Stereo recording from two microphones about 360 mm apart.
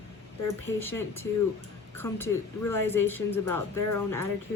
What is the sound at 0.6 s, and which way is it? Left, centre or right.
A woman's voice, centre.